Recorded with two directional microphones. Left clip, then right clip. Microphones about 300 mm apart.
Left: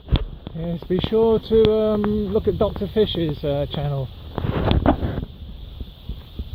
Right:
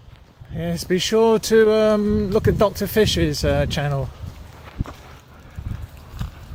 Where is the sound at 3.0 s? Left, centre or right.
Right.